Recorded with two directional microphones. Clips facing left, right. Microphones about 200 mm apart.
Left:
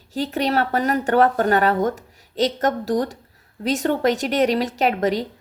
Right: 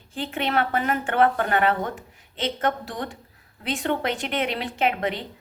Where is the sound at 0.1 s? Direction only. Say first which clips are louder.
Left 5 dB; 40° left (ahead or behind).